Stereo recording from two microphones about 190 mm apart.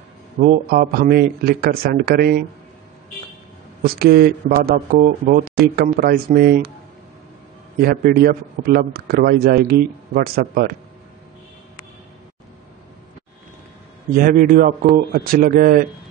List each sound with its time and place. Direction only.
0.4 s a man's voice: 45° right (ahead or behind)
3.8 s a man's voice: 55° right (ahead or behind)
7.8 s a man's voice: 50° right (ahead or behind)
14.1 s a man's voice: 45° right (ahead or behind)